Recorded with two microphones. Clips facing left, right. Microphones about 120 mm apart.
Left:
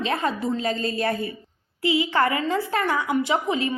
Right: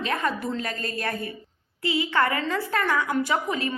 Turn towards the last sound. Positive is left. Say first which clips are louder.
# left 3 dB
turn(degrees=25)  # may be behind; listen again after turning